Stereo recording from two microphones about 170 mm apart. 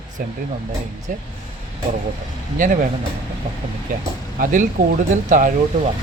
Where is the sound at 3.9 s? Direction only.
55° right (ahead or behind).